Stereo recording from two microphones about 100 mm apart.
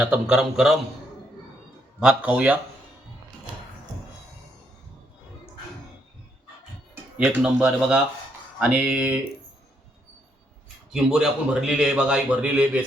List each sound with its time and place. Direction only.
0.0 s a man's voice: 10° right (ahead or behind)
2.0 s a man's voice: 10° right (ahead or behind)
7.3 s a man's voice: 10° right (ahead or behind)
10.9 s a man's voice: 10° right (ahead or behind)